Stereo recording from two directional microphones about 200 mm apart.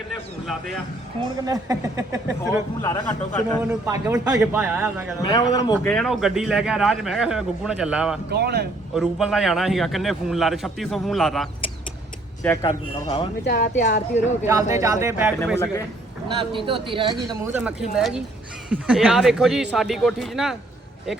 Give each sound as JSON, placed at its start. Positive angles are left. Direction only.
{"t": 1.5, "sound": "speech", "side_deg": -15}
{"t": 2.8, "sound": "a man's voice", "side_deg": 15}
{"t": 3.6, "sound": "speech", "side_deg": -15}
{"t": 5.2, "sound": "speech", "side_deg": 20}
{"t": 5.9, "sound": "a man's voice", "side_deg": 0}
{"t": 8.3, "sound": "speech", "side_deg": -55}
{"t": 9.0, "sound": "a man's voice", "side_deg": 0}
{"t": 12.4, "sound": "speech", "side_deg": 15}
{"t": 13.4, "sound": "speech", "side_deg": 50}
{"t": 14.4, "sound": "speech", "side_deg": -15}
{"t": 16.4, "sound": "speech", "side_deg": -25}
{"t": 17.2, "sound": "a man's voice", "side_deg": -10}